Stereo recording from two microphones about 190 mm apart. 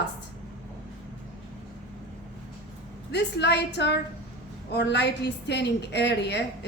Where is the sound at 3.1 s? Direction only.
65° left (ahead or behind).